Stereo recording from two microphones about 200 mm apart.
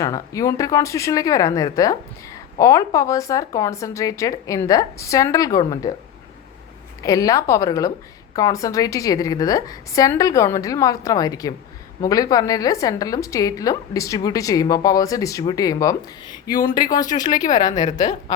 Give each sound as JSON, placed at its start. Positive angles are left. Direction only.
{"t": 0.0, "sound": "a woman's voice", "side_deg": 15}
{"t": 7.0, "sound": "a woman's voice", "side_deg": 15}